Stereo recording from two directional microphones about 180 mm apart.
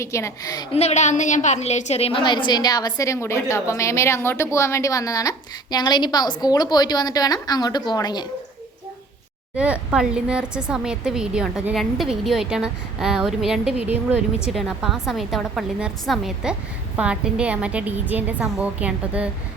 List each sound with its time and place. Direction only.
0.0 s speech: 15° left (ahead or behind)
0.7 s a woman's voice: 35° left (ahead or behind)
9.6 s a woman's voice: 5° right (ahead or behind)